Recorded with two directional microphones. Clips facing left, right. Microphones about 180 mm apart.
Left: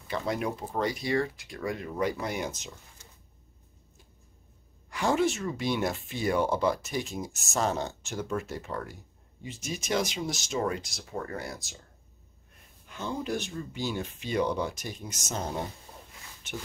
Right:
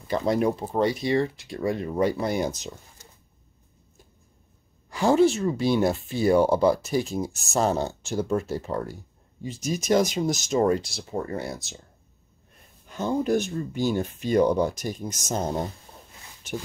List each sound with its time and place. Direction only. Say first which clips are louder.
0.1 s speech: right 8 dB; 35° right (ahead or behind)
4.8 s speech: right 7 dB; 30° right (ahead or behind)
12.8 s speech: right 8 dB; 40° right (ahead or behind)